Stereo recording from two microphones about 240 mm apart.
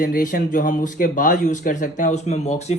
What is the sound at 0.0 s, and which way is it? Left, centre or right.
Speech, left.